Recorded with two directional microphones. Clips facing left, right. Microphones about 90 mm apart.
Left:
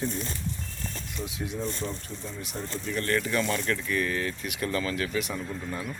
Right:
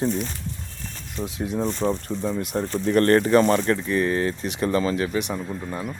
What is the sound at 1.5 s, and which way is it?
Speech, 55° right (ahead or behind).